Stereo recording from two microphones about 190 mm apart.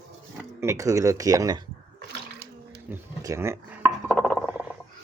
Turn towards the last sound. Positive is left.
turn(degrees=-5)  # may be behind; listen again after turning